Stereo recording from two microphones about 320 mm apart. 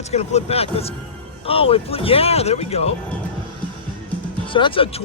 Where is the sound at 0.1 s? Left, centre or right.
Centre.